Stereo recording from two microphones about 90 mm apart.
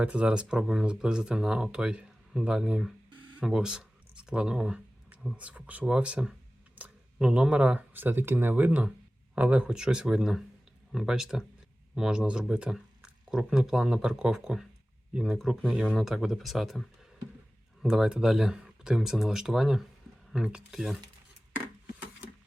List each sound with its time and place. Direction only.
0.0 s speech: 10° right (ahead or behind)
17.8 s speech: 5° right (ahead or behind)